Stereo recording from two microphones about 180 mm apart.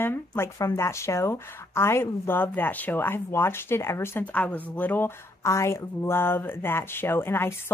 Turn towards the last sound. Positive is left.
turn(degrees=10)  # may be behind; listen again after turning